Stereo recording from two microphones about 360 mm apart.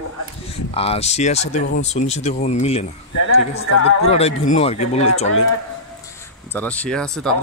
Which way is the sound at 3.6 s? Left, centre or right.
Left.